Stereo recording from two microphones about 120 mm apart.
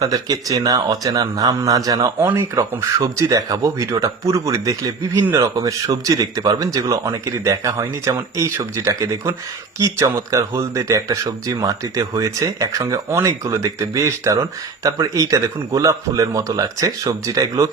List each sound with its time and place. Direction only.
0.0 s speech: 30° right (ahead or behind)